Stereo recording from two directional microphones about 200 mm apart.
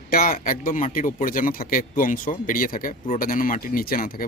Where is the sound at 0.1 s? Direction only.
45° left (ahead or behind).